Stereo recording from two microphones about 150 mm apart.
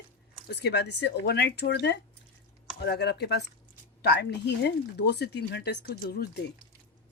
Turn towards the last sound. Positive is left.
turn(degrees=90)